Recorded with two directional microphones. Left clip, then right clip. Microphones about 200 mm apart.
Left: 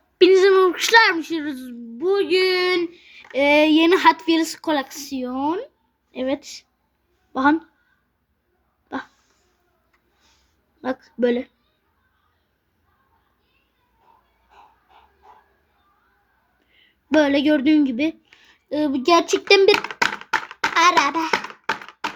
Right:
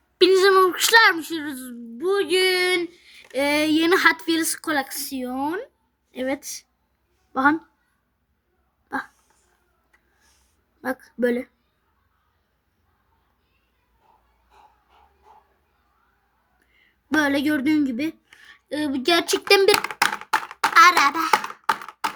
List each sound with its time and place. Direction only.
0.2 s a child's voice: 15° right (ahead or behind)
10.8 s speech: 20° right (ahead or behind)
17.2 s a woman's voice: 20° right (ahead or behind)
19.5 s a sound: 15° right (ahead or behind)